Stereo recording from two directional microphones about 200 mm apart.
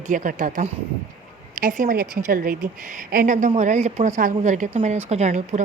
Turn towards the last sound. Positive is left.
turn(degrees=-35)  # may be behind; listen again after turning